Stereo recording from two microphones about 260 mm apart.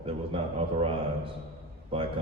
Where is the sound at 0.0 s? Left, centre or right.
Right.